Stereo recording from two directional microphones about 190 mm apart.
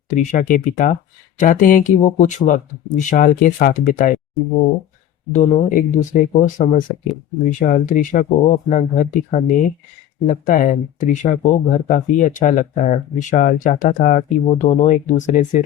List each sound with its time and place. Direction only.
0.1 s speech: 40° left (ahead or behind)
5.3 s speech: 35° left (ahead or behind)